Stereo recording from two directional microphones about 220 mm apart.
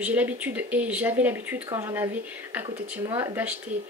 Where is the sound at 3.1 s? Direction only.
20° right (ahead or behind).